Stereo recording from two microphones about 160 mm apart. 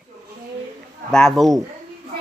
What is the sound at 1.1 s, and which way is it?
Speech, 5° left (ahead or behind).